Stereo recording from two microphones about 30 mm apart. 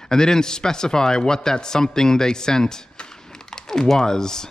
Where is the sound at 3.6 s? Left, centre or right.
Centre.